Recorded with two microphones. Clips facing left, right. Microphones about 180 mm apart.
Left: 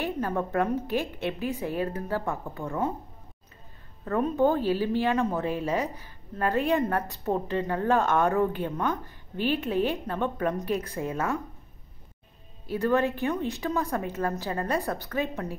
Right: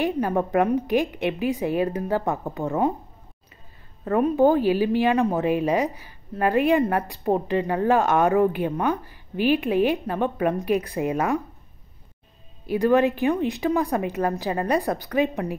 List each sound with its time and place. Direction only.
0.5 s speech: 15° right (ahead or behind)
4.4 s speech: 10° right (ahead or behind)
12.6 s speech: 15° right (ahead or behind)